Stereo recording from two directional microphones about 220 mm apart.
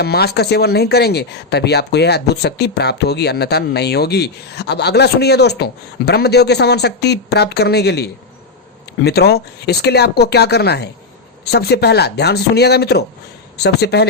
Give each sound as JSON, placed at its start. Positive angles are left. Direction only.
{"t": 0.0, "sound": "speech", "side_deg": 45}